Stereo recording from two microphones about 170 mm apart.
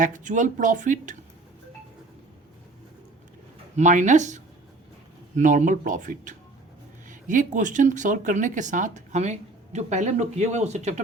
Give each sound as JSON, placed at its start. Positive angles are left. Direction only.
{"t": 0.0, "sound": "speech", "side_deg": -45}
{"t": 3.8, "sound": "speech", "side_deg": -45}